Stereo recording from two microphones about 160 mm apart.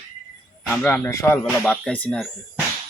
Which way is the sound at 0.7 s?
10° left (ahead or behind).